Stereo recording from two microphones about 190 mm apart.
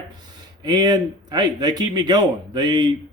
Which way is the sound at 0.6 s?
20° right (ahead or behind).